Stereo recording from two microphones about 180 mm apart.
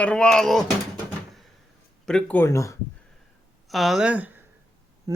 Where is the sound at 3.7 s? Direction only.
Centre (ahead or behind).